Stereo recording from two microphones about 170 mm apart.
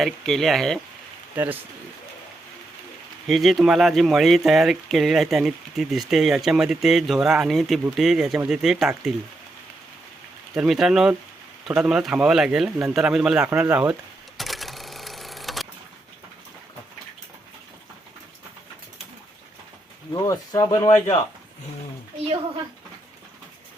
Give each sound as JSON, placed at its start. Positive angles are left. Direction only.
{"t": 0.0, "sound": "speech", "side_deg": 0}
{"t": 3.2, "sound": "speech", "side_deg": 0}
{"t": 10.5, "sound": "speech", "side_deg": 0}
{"t": 14.3, "sound": "sewing machine", "side_deg": 0}
{"t": 20.1, "sound": "speech", "side_deg": 20}